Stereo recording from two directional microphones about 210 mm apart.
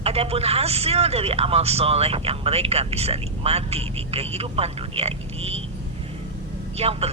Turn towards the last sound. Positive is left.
turn(degrees=-30)  # may be behind; listen again after turning